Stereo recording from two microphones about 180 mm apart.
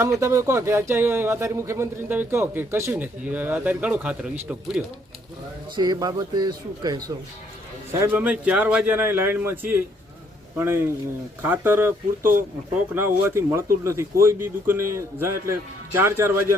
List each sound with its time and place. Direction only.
0.0 s speech: 15° right (ahead or behind)
5.7 s speech: 25° right (ahead or behind)